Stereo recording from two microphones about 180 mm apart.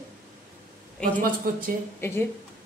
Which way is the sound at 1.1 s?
50° right (ahead or behind).